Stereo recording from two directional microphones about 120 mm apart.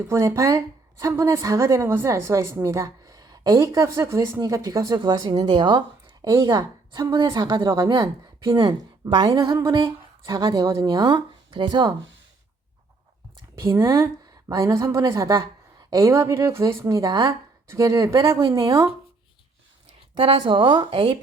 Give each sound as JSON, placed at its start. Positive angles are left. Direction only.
{"t": 0.0, "sound": "speech", "side_deg": -25}
{"t": 5.5, "sound": "a woman's voice", "side_deg": -45}
{"t": 6.2, "sound": "a woman's voice", "side_deg": -30}
{"t": 9.4, "sound": "a sound", "side_deg": -30}
{"t": 10.4, "sound": "speech", "side_deg": -35}
{"t": 13.6, "sound": "speech", "side_deg": -20}
{"t": 20.1, "sound": "a woman's voice", "side_deg": -50}